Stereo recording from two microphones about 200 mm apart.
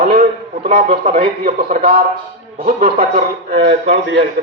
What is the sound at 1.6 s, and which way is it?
A man's voice, 50° right (ahead or behind).